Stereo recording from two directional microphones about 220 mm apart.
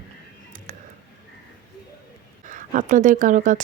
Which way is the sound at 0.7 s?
35° right (ahead or behind).